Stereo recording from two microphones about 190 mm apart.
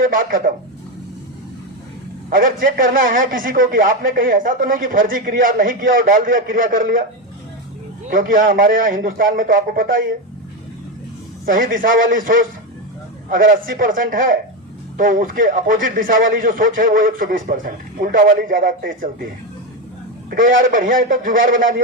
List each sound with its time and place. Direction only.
0.0 s a man's voice: 45° right (ahead or behind)
2.3 s a man's voice: 45° right (ahead or behind)
8.1 s a man's voice: 45° right (ahead or behind)
11.4 s a man's voice: 45° right (ahead or behind)
20.6 s a man's voice: 45° right (ahead or behind)